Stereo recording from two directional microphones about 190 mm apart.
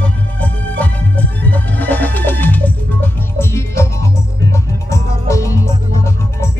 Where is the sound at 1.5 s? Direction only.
10° left (ahead or behind).